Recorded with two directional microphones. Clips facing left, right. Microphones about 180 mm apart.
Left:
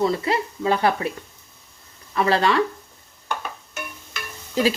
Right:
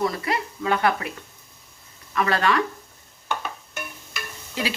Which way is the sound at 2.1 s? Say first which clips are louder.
Left 3 dB; 30° left (ahead or behind).